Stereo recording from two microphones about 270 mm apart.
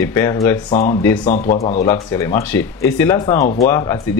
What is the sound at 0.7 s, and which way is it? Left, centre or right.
Speech, left.